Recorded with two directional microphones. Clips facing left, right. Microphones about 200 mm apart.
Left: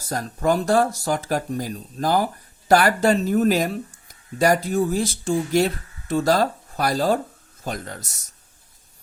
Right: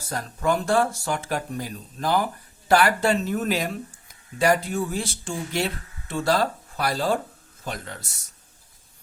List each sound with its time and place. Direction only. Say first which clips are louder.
0.0 s speech: left 3 dB; 40° left (ahead or behind)